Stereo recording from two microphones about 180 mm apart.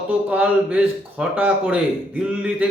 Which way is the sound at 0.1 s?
10° right (ahead or behind).